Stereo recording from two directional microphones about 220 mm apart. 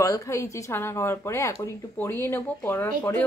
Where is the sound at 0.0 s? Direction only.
15° left (ahead or behind).